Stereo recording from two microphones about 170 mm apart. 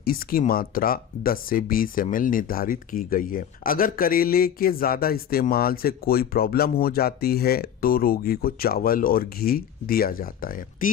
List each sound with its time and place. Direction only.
0.0 s speech: 60° left (ahead or behind)